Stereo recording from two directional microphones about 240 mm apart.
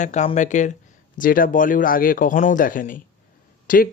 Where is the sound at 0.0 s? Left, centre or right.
Left.